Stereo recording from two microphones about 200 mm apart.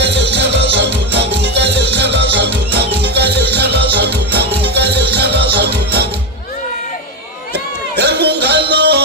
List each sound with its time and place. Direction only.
0.0 s music: 60° right (ahead or behind)
7.5 s music: 55° right (ahead or behind)